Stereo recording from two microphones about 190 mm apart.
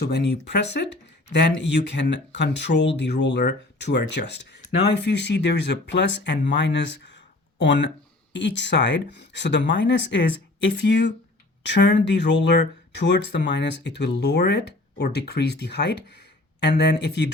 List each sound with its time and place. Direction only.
0.0 s speech: 60° left (ahead or behind)